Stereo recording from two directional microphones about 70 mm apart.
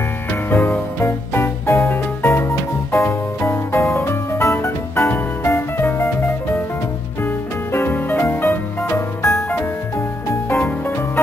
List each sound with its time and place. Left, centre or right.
0.3 s music: left
7.7 s music: left